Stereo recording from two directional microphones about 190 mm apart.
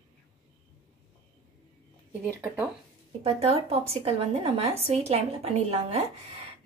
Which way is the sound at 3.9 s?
30° right (ahead or behind).